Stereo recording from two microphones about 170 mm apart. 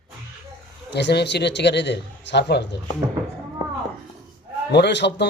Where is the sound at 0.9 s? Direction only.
75° left (ahead or behind).